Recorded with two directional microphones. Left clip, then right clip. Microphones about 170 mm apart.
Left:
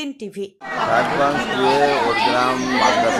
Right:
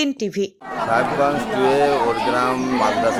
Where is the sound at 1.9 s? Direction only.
15° right (ahead or behind).